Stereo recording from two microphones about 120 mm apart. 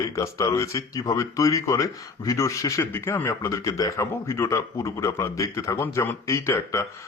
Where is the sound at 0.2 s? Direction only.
25° left (ahead or behind).